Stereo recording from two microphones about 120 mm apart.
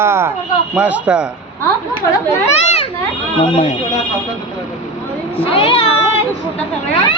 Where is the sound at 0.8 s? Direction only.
10° right (ahead or behind).